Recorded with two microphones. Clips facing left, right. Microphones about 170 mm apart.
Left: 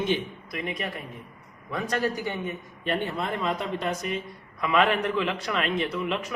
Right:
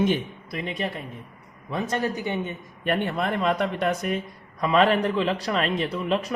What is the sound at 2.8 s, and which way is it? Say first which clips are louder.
Speech: right 4 dB; 60° right (ahead or behind).